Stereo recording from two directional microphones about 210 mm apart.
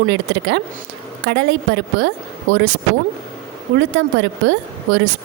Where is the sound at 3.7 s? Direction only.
60° right (ahead or behind).